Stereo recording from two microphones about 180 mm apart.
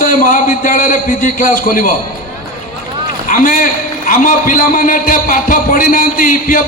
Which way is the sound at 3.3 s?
50° left (ahead or behind).